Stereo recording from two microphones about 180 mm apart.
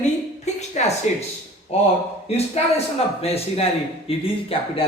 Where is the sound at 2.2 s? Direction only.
35° left (ahead or behind).